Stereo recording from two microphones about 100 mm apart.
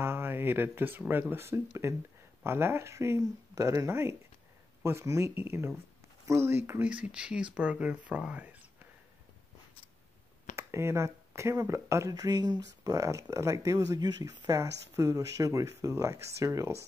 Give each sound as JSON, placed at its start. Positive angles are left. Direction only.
{"t": 0.0, "sound": "speech", "side_deg": -20}
{"t": 7.0, "sound": "speech", "side_deg": -10}
{"t": 10.5, "sound": "speech", "side_deg": -25}